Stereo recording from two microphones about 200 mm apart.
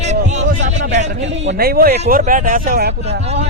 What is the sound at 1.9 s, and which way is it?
Speech, 35° right (ahead or behind).